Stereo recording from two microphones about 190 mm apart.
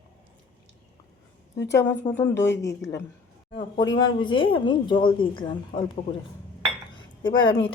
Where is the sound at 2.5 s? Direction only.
15° left (ahead or behind).